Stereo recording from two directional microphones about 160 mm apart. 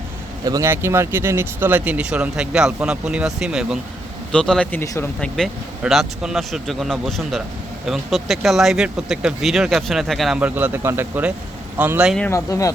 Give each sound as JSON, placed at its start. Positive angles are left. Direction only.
{"t": 0.4, "sound": "speech", "side_deg": -20}
{"t": 5.4, "sound": "speech", "side_deg": 0}
{"t": 12.3, "sound": "speech", "side_deg": 20}